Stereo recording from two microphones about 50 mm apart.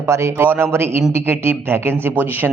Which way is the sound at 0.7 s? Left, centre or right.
Right.